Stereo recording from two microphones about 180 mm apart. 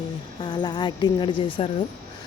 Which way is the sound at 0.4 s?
25° left (ahead or behind).